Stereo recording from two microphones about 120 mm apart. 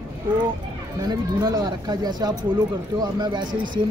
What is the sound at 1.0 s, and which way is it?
Speech, 35° right (ahead or behind).